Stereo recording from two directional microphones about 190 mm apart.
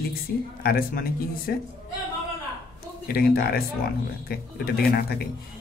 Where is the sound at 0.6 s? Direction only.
50° left (ahead or behind).